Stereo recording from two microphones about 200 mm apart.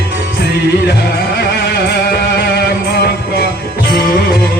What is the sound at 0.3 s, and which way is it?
Music, 50° left (ahead or behind).